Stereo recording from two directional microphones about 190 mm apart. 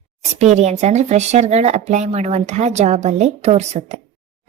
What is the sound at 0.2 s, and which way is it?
A woman's voice, 35° right (ahead or behind).